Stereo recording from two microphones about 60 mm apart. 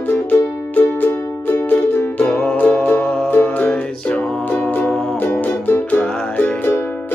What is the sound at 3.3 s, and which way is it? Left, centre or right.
Music, left.